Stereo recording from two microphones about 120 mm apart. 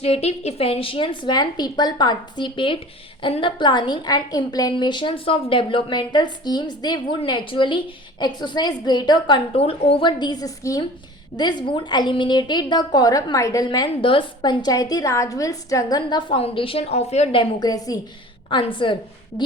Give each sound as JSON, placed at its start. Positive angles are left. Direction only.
{"t": 0.0, "sound": "a woman's voice", "side_deg": 60}
{"t": 9.6, "sound": "a woman's voice", "side_deg": 55}
{"t": 13.7, "sound": "a woman's voice", "side_deg": 40}
{"t": 16.4, "sound": "a woman's voice", "side_deg": 50}
{"t": 17.6, "sound": "a woman's voice", "side_deg": 30}
{"t": 18.4, "sound": "a woman's voice", "side_deg": 45}